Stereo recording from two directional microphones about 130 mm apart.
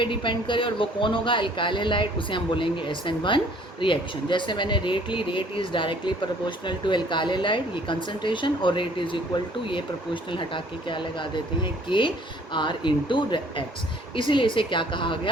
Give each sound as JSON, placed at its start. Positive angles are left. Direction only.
{"t": 0.0, "sound": "speech", "side_deg": 40}